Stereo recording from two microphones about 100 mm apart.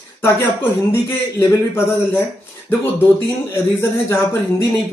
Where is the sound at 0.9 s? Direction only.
30° left (ahead or behind).